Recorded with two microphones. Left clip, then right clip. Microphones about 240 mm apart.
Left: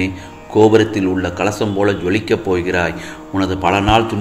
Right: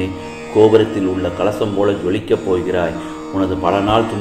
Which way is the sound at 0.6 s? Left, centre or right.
Left.